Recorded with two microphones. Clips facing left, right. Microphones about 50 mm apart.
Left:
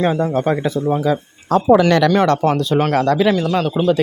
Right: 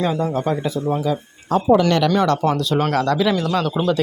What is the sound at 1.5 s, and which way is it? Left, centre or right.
Speech, left.